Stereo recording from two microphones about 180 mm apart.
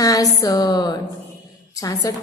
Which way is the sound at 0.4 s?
20° left (ahead or behind).